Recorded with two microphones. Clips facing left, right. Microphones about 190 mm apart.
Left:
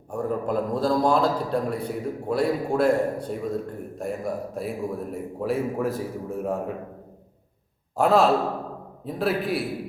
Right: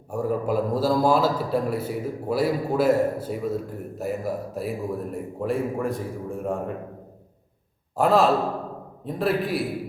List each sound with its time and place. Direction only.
0.1 s a man's voice: 5° right (ahead or behind)
7.9 s a man's voice: centre (ahead or behind)